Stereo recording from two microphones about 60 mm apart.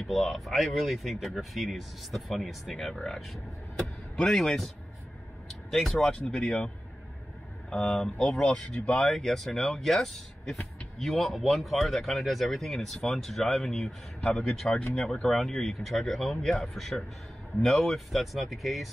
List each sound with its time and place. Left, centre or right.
0.0 s speech: centre
6.1 s speech: centre
7.7 s speech: centre